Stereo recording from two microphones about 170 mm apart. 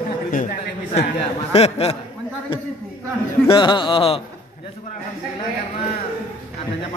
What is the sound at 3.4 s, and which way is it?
Speech, 30° left (ahead or behind).